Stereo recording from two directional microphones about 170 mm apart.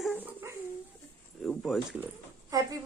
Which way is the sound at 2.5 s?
20° right (ahead or behind).